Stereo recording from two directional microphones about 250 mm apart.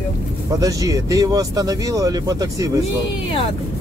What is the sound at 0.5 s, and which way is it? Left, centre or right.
Speech, centre.